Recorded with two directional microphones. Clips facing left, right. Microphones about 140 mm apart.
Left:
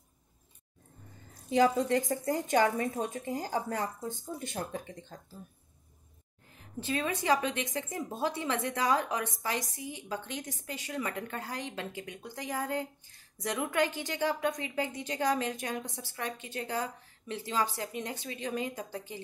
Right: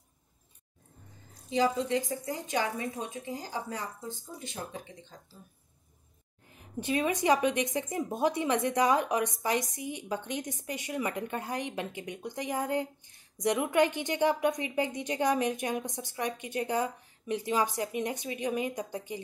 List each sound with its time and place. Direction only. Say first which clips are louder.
1.5 s a woman's voice: left 2 dB; 50° left (ahead or behind)
6.5 s a woman's voice: right 3 dB; 20° right (ahead or behind)